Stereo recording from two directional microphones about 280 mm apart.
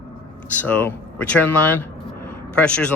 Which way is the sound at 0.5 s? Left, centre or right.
Centre.